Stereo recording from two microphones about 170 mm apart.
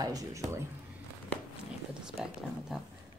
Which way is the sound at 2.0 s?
5° right (ahead or behind).